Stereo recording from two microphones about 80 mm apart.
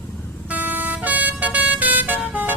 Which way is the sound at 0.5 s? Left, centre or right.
Right.